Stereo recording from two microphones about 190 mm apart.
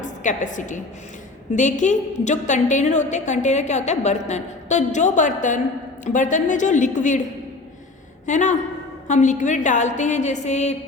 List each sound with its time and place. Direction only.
0.0 s a woman's voice: 40° left (ahead or behind)
8.3 s a woman's voice: 40° left (ahead or behind)